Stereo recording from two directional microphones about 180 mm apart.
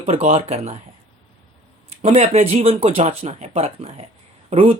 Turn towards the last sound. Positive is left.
turn(degrees=-35)  # may be behind; listen again after turning